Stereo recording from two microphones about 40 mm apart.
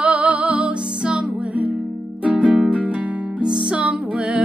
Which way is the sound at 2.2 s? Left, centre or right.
Right.